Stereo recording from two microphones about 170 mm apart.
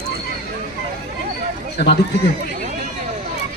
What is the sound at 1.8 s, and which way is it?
Speech, 65° left (ahead or behind).